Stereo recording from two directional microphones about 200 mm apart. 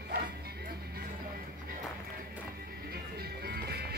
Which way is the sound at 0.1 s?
50° right (ahead or behind).